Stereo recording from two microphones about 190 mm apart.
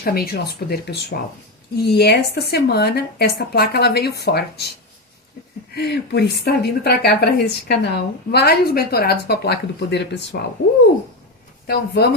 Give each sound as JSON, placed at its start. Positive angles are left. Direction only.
{"t": 0.0, "sound": "a woman's voice", "side_deg": 55}
{"t": 5.7, "sound": "a woman's voice", "side_deg": 60}
{"t": 11.6, "sound": "a woman's voice", "side_deg": 55}